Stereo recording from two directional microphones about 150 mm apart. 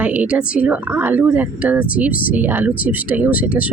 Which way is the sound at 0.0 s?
10° right (ahead or behind).